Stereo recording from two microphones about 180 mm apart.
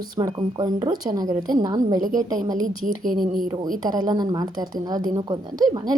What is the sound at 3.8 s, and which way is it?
A woman's voice, 20° right (ahead or behind).